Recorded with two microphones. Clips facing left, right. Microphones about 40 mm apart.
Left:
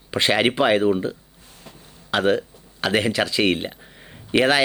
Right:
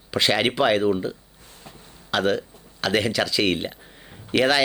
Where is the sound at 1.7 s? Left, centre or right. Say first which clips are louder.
Even; right.